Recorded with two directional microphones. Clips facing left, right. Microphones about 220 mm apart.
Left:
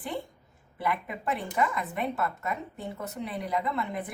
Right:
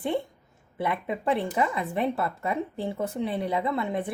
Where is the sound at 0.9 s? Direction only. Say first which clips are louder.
Right 4 dB; 25° right (ahead or behind).